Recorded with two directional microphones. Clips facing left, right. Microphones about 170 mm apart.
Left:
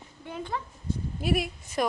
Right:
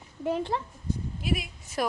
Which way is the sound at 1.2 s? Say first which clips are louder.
Left 5 dB; 50° left (ahead or behind).